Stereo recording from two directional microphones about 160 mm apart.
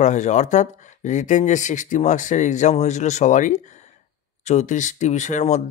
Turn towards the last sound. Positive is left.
turn(degrees=50)  # may be behind; listen again after turning